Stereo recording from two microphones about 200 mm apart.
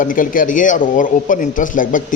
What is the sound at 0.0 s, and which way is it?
Speech, 45° left (ahead or behind).